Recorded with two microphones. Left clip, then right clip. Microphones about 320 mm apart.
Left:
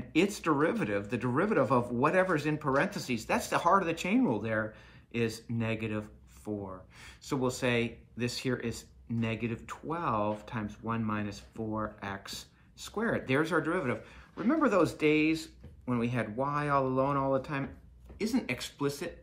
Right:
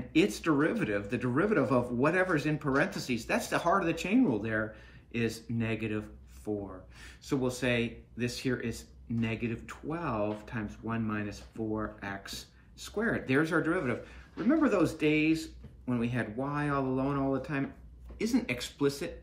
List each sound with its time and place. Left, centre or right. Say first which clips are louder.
0.4 s speech: even; centre
12.3 s computer keyboard: even; left
12.8 s speech: even; centre